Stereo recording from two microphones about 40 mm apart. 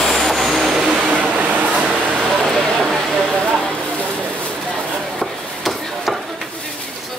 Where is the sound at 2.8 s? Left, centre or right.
Centre.